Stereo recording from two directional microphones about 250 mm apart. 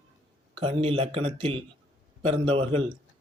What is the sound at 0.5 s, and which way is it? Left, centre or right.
Speech, right.